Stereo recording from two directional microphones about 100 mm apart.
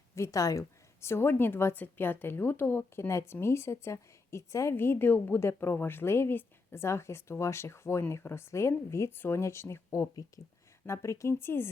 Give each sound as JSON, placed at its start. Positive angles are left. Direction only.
{"t": 0.2, "sound": "a woman's voice", "side_deg": 35}